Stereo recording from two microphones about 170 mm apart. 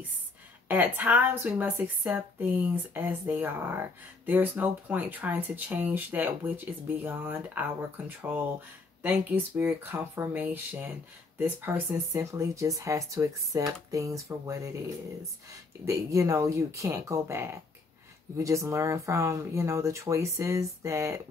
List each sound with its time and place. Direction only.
0.7 s speech: 10° right (ahead or behind)
15.8 s speech: 20° right (ahead or behind)